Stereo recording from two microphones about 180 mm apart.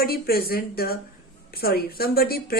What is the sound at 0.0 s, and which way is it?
Speech, 55° left (ahead or behind).